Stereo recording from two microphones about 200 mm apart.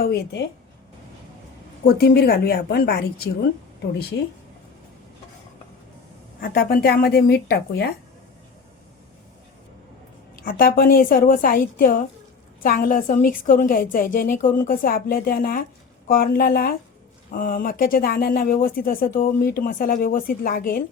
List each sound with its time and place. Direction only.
0.0 s speech: 55° left (ahead or behind)
1.8 s speech: 50° left (ahead or behind)
6.4 s speech: 50° left (ahead or behind)
10.4 s speech: 45° left (ahead or behind)